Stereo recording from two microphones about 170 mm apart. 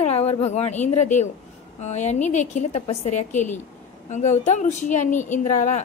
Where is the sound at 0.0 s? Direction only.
40° left (ahead or behind).